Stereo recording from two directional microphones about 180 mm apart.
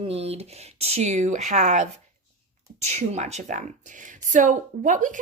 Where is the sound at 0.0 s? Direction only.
35° right (ahead or behind).